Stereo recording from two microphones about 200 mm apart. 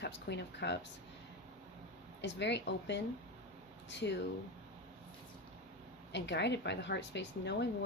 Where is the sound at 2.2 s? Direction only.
60° left (ahead or behind).